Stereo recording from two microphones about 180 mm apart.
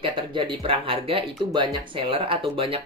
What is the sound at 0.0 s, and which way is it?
Speech, 30° right (ahead or behind).